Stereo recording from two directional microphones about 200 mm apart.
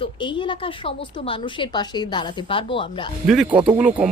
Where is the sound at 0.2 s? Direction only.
25° left (ahead or behind).